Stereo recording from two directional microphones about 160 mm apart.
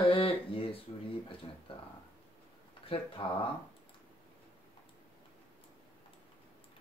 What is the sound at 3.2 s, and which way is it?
Speech, 35° left (ahead or behind).